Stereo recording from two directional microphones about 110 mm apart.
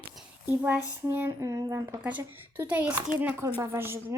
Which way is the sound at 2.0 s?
15° right (ahead or behind).